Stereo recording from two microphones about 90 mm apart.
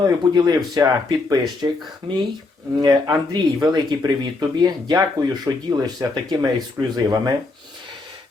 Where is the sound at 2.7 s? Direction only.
45° right (ahead or behind).